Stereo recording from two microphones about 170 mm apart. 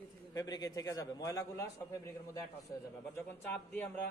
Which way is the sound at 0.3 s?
20° left (ahead or behind).